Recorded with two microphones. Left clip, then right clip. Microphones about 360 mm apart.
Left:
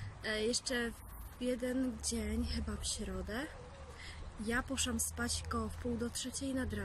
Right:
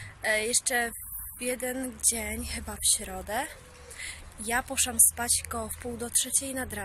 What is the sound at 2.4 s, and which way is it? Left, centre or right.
Speech, centre.